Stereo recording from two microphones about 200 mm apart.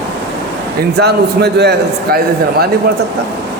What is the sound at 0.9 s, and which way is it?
Speech, 55° right (ahead or behind).